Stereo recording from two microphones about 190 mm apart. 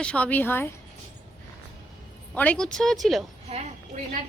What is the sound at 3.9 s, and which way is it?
Speech, 40° right (ahead or behind).